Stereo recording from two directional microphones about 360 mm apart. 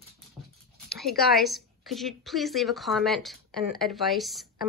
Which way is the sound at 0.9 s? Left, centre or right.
Centre.